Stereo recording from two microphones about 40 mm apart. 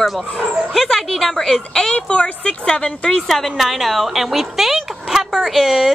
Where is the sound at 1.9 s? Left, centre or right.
Left.